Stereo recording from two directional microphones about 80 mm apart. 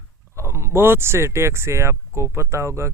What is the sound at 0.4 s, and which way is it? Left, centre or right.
Speech, right.